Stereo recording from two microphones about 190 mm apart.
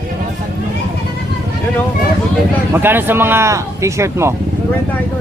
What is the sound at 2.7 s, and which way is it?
Speech, 10° right (ahead or behind).